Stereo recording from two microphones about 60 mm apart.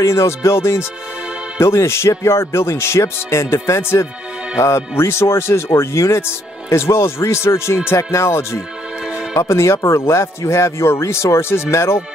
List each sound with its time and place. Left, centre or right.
0.0 s speech: left